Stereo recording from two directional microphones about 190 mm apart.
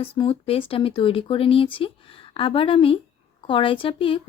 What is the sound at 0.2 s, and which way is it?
Speech, 30° left (ahead or behind).